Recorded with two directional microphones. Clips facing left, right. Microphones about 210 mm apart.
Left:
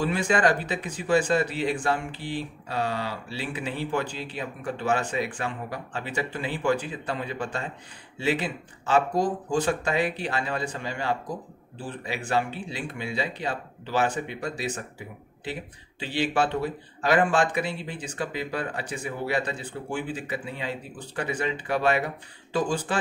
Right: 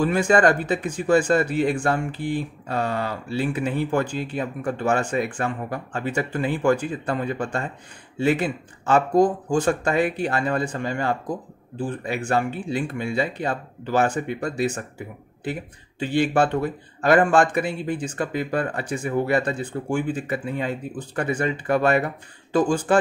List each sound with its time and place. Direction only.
0.0 s speech: 50° right (ahead or behind)